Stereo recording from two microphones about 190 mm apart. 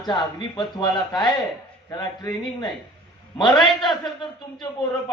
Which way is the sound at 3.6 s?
25° left (ahead or behind).